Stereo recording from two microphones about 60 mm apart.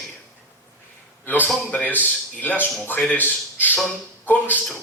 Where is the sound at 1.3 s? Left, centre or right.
Left.